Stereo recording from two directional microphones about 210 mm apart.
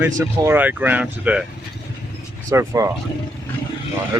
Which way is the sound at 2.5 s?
15° right (ahead or behind).